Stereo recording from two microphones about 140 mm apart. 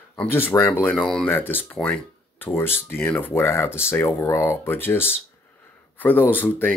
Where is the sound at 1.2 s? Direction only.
15° left (ahead or behind).